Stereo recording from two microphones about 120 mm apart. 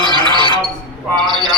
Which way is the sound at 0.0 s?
40° left (ahead or behind).